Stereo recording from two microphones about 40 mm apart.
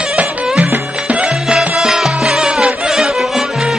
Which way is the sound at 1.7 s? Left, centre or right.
Centre.